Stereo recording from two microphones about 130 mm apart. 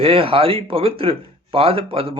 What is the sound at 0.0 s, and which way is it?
A man's voice, 45° right (ahead or behind).